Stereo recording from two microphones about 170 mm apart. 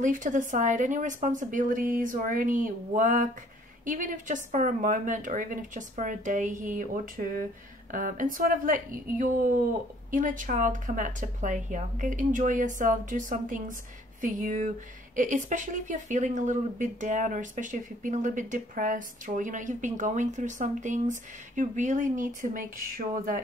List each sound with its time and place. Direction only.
0.0 s a woman's voice: 50° right (ahead or behind)